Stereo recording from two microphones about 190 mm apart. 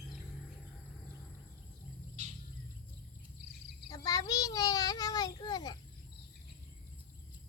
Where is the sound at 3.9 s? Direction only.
20° left (ahead or behind).